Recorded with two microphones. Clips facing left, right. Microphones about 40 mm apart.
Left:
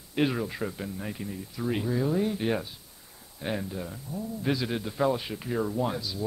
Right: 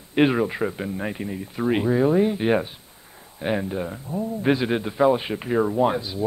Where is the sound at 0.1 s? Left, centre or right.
Right.